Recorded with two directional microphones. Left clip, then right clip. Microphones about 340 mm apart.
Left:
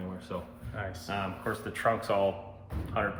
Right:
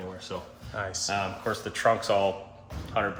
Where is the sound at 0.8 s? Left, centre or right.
Centre.